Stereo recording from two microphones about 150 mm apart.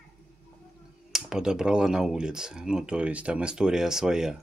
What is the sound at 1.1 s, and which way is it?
Speech, 5° right (ahead or behind).